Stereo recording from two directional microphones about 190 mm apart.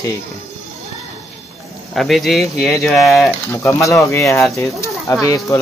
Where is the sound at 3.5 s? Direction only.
15° left (ahead or behind).